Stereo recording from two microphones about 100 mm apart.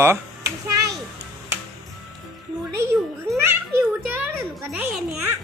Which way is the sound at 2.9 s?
25° right (ahead or behind).